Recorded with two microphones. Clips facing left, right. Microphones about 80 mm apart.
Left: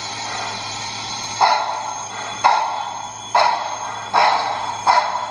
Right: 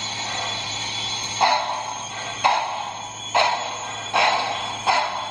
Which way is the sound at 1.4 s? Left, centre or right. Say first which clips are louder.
Left 4 dB; centre.